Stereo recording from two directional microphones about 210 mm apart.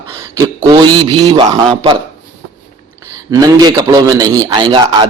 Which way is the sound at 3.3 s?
15° right (ahead or behind).